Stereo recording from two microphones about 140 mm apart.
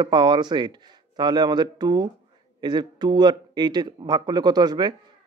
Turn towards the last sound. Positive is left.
turn(degrees=-30)  # may be behind; listen again after turning